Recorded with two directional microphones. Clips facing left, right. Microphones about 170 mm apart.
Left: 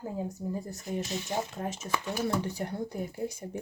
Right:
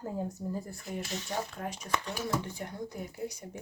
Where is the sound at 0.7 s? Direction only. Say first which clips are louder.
Left 4 dB; 20° left (ahead or behind).